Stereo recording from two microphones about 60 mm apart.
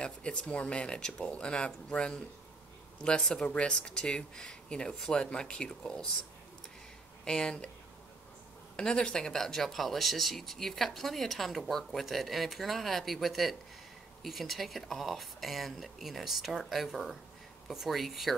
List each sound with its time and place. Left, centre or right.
0.0 s speech: centre
7.2 s speech: centre
8.7 s speech: centre